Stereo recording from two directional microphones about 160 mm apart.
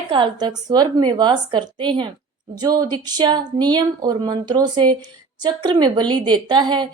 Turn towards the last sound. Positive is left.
turn(degrees=-30)  # may be behind; listen again after turning